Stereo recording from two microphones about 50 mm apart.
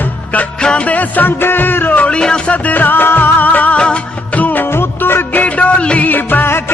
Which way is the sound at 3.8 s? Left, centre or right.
Left.